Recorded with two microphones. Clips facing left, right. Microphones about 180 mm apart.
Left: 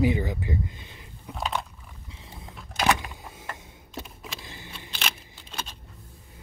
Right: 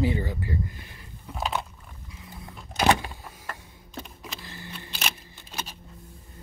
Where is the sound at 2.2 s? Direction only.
25° left (ahead or behind).